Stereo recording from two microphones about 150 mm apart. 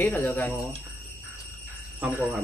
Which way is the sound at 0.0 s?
10° left (ahead or behind).